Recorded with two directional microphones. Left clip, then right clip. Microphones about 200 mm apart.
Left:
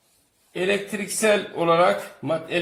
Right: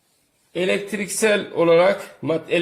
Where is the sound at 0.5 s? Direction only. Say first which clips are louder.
Right 2 dB; 50° right (ahead or behind).